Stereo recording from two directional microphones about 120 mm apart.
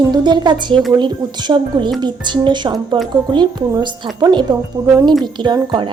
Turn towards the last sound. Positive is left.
turn(degrees=-40)  # may be behind; listen again after turning